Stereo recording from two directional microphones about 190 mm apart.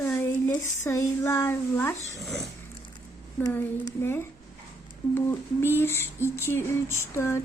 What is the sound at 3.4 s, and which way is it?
A woman's voice, 15° left (ahead or behind).